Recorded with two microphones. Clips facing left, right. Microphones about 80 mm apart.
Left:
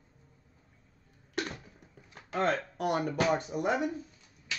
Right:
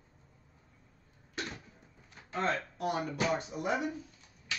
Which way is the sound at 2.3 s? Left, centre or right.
Left.